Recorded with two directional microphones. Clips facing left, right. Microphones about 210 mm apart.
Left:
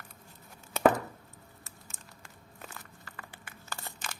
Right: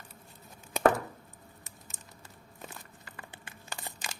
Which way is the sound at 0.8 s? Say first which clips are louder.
Left 1 dB; 15° right (ahead or behind).